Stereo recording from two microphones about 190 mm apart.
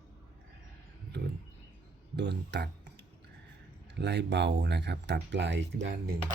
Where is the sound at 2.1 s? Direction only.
65° right (ahead or behind).